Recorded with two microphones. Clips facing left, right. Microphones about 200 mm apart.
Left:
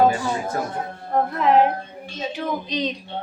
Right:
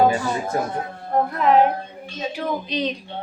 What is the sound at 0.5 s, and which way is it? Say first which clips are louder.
Speech: right 2 dB; 20° right (ahead or behind).